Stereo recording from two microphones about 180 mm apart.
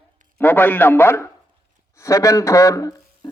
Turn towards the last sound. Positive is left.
turn(degrees=20)  # may be behind; listen again after turning